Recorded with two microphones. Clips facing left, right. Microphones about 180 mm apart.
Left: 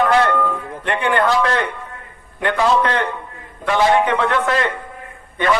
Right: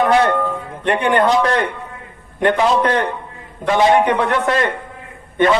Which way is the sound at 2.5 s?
20° right (ahead or behind).